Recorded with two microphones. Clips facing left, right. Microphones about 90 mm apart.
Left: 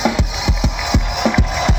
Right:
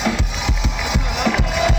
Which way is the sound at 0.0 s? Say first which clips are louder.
Left 3 dB; 15° left (ahead or behind).